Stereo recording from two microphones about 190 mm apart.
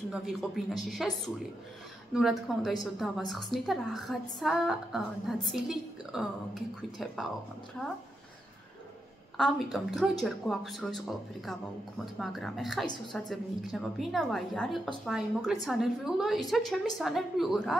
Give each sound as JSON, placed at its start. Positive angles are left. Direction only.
{"t": 0.1, "sound": "a woman's voice", "side_deg": 0}
{"t": 9.4, "sound": "a woman's voice", "side_deg": 0}
{"t": 12.0, "sound": "a woman's voice", "side_deg": 0}